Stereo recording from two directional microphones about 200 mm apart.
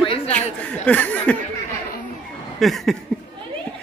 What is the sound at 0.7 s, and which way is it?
Chuckle, 5° left (ahead or behind).